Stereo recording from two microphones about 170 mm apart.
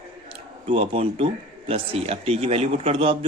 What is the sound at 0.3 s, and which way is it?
Speech, 35° right (ahead or behind).